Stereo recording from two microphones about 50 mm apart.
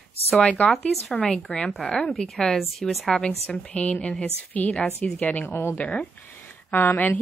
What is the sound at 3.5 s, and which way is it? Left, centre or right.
A woman's voice, left.